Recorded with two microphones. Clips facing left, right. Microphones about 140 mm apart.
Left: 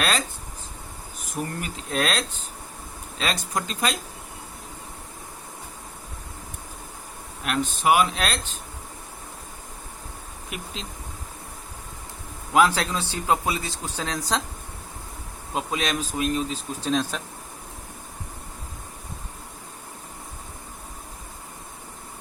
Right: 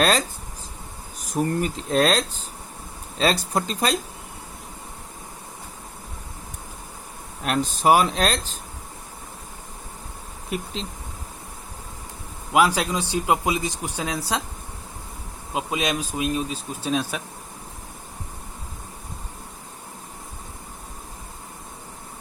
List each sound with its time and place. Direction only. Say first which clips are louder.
0.0 s speech: right 5 dB; 35° right (ahead or behind)
7.4 s speech: right 3 dB; 35° right (ahead or behind)
10.5 s speech: right 8 dB; 35° right (ahead or behind)
12.5 s speech: right 1 dB; 10° right (ahead or behind)
15.5 s speech: right 1 dB; 10° right (ahead or behind)